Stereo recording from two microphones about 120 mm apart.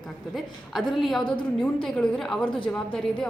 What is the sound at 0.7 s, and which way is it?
A woman's voice, centre (ahead or behind).